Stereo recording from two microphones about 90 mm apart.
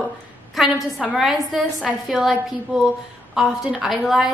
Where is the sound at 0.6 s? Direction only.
Centre (ahead or behind).